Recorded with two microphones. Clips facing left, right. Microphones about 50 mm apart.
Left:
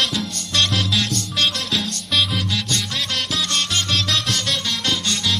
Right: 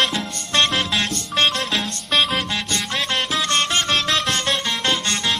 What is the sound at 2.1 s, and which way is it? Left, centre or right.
Music, centre.